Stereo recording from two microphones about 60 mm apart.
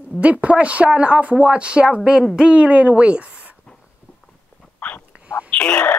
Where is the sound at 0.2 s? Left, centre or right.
Right.